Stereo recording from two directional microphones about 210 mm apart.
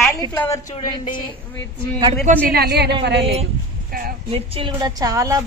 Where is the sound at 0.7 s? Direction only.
25° left (ahead or behind).